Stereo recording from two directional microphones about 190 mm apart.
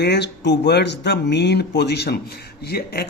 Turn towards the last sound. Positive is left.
turn(degrees=55)  # may be behind; listen again after turning